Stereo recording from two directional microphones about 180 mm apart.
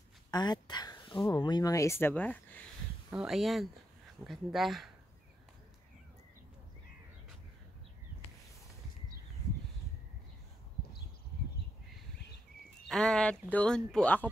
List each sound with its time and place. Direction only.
0.3 s speech: 25° left (ahead or behind)
3.1 s speech: 5° right (ahead or behind)
12.8 s speech: 5° left (ahead or behind)